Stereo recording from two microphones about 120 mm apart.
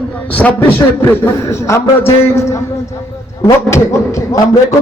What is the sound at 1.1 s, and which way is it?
A man's voice, 25° left (ahead or behind).